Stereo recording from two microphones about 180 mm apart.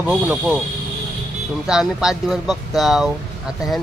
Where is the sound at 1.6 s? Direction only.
5° right (ahead or behind).